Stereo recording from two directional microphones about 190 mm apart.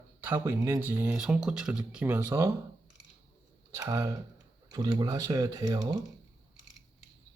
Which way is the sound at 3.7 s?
20° right (ahead or behind).